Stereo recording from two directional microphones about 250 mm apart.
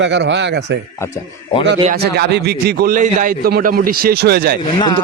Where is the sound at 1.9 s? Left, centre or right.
Right.